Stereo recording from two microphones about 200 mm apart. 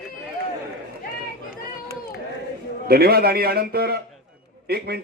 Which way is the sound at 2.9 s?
50° right (ahead or behind).